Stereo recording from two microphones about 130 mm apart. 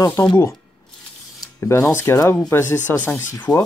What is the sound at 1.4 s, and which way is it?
Speech, 20° left (ahead or behind).